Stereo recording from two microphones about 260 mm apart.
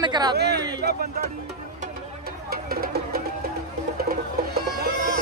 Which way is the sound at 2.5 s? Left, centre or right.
Right.